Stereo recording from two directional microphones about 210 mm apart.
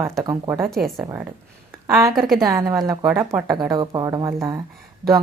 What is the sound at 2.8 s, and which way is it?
Speech, 15° right (ahead or behind).